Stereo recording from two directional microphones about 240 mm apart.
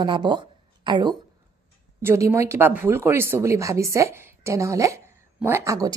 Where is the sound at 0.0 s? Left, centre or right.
Centre.